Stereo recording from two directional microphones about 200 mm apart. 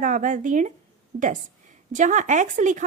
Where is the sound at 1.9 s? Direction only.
40° right (ahead or behind).